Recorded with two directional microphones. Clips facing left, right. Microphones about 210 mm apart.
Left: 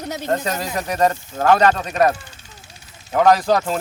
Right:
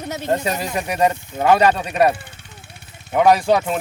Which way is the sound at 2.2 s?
60° right (ahead or behind).